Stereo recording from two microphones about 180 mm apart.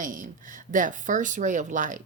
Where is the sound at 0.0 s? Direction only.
45° right (ahead or behind).